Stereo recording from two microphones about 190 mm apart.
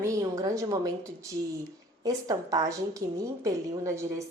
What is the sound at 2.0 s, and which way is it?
A woman's voice, 20° right (ahead or behind).